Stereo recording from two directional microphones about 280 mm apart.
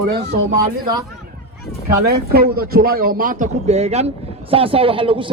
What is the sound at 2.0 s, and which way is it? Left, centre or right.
A man's voice, right.